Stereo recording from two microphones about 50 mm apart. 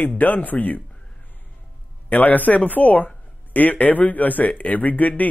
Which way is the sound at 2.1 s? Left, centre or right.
Left.